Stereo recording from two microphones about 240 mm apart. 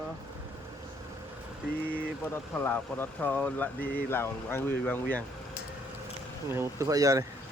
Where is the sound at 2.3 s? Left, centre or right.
Centre.